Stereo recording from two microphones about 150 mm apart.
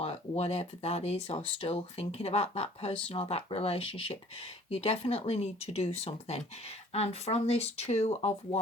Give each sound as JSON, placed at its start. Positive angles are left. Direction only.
{"t": 0.0, "sound": "speech", "side_deg": 45}